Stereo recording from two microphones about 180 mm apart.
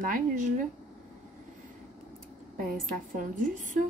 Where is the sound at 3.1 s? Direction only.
45° right (ahead or behind).